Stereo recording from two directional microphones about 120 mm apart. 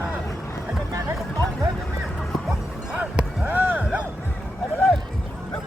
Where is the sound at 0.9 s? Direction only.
30° right (ahead or behind).